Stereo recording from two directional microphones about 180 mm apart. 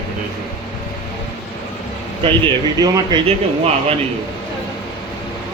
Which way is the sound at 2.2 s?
25° right (ahead or behind).